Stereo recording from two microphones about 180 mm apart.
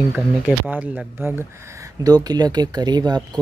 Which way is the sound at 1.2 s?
15° right (ahead or behind).